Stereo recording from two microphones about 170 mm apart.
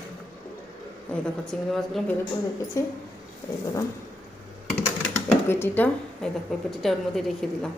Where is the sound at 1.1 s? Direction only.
5° left (ahead or behind).